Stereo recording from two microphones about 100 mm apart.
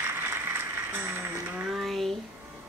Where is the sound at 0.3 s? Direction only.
25° right (ahead or behind).